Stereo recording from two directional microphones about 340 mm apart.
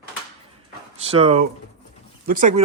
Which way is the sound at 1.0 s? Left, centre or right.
Centre.